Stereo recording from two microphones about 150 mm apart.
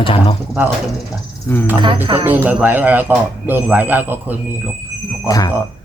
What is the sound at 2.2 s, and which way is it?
Speech, 10° right (ahead or behind).